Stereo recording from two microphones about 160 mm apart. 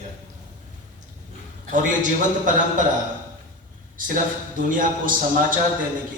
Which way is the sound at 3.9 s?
60° right (ahead or behind).